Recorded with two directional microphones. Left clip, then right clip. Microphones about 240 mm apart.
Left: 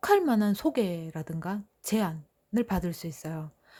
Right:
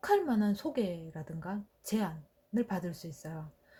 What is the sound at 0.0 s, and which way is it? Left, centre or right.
Speech, left.